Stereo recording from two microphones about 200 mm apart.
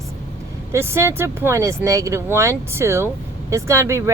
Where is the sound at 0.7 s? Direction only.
10° right (ahead or behind).